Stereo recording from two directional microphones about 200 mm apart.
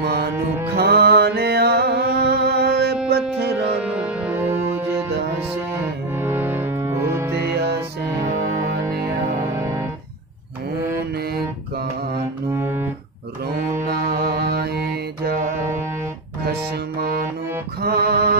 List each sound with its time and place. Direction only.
0.0 s music: 55° right (ahead or behind)
3.8 s music: 5° right (ahead or behind)
6.1 s music: 10° right (ahead or behind)
7.3 s music: 55° right (ahead or behind)
9.5 s music: 15° right (ahead or behind)
12.5 s music: 10° right (ahead or behind)
13.8 s mantra: 50° right (ahead or behind)
15.2 s music: 40° right (ahead or behind)
17.8 s music: 50° right (ahead or behind)